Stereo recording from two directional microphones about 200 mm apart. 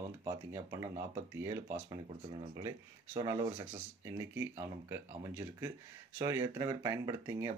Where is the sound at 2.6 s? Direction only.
15° right (ahead or behind).